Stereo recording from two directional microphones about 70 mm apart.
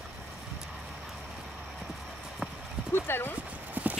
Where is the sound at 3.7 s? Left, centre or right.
Right.